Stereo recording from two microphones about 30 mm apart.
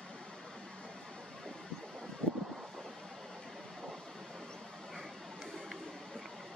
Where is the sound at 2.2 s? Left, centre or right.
Left.